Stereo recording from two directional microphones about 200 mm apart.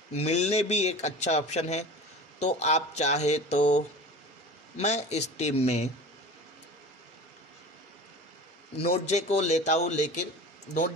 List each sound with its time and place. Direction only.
0.1 s a man's voice: 30° left (ahead or behind)
9.0 s a man's voice: 35° left (ahead or behind)